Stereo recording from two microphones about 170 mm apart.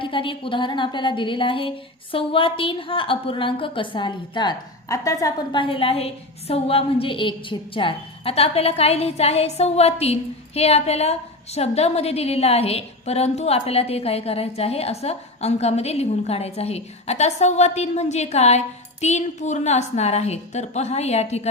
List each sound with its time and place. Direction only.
0.0 s a woman's voice: 30° left (ahead or behind)